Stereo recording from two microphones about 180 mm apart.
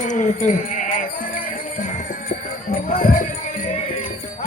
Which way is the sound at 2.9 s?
45° left (ahead or behind).